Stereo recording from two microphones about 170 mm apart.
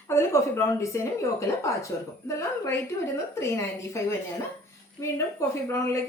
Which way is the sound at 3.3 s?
15° left (ahead or behind).